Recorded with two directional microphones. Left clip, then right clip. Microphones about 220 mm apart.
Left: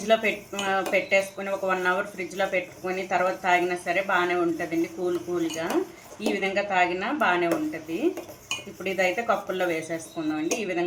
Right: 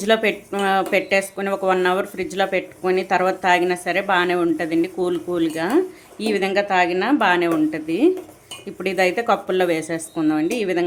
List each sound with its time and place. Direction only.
0.0 s speech: 55° right (ahead or behind)